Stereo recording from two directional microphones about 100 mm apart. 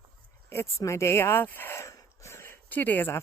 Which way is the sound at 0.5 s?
30° left (ahead or behind).